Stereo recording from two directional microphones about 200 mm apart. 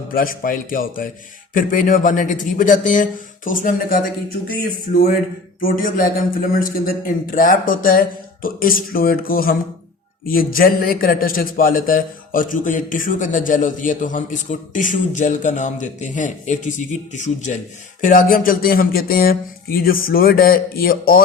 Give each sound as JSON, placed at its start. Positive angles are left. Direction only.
{"t": 0.1, "sound": "a man's voice", "side_deg": 45}
{"t": 5.5, "sound": "a man's voice", "side_deg": 45}